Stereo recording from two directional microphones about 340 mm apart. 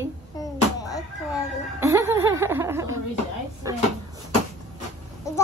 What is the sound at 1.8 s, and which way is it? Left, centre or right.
Speech, centre.